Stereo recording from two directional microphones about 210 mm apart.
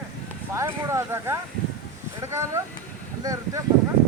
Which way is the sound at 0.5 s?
15° right (ahead or behind).